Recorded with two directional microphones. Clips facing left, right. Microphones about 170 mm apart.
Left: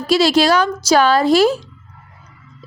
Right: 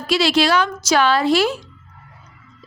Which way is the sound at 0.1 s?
40° left (ahead or behind).